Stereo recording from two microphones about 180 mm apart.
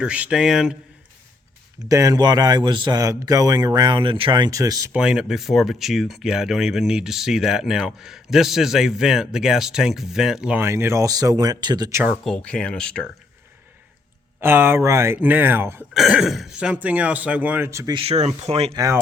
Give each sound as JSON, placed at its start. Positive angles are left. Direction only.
{"t": 0.0, "sound": "speech", "side_deg": -5}
{"t": 1.9, "sound": "a man's voice", "side_deg": -20}
{"t": 4.9, "sound": "speech", "side_deg": -5}
{"t": 12.2, "sound": "speech", "side_deg": 5}
{"t": 14.4, "sound": "speech", "side_deg": -10}
{"t": 17.9, "sound": "speech", "side_deg": -35}
{"t": 18.7, "sound": "a man's voice", "side_deg": -20}